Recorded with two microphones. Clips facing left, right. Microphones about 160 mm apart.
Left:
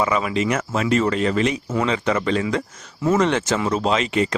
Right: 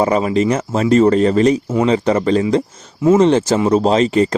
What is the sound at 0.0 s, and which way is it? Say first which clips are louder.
Speech: right 6 dB; 35° right (ahead or behind).